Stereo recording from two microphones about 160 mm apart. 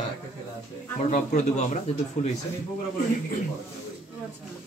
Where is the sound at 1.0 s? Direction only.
50° left (ahead or behind).